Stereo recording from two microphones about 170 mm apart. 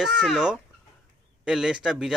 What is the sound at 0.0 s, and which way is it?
Speech, 5° right (ahead or behind).